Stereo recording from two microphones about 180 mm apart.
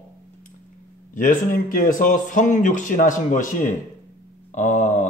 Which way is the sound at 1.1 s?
50° left (ahead or behind).